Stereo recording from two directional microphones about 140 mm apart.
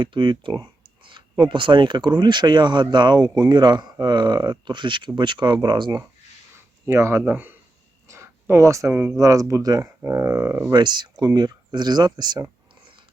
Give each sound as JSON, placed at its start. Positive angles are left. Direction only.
{"t": 0.0, "sound": "speech", "side_deg": -35}
{"t": 6.8, "sound": "speech", "side_deg": -20}
{"t": 8.0, "sound": "a sound", "side_deg": -20}
{"t": 8.9, "sound": "speech", "side_deg": -10}
{"t": 9.1, "sound": "speech", "side_deg": -25}
{"t": 10.7, "sound": "speech", "side_deg": -30}